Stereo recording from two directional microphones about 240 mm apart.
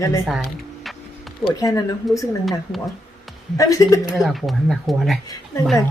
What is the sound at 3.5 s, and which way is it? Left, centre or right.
Speech, centre.